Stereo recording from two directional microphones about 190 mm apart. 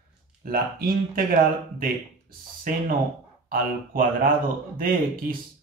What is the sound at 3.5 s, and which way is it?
Speech, 50° right (ahead or behind).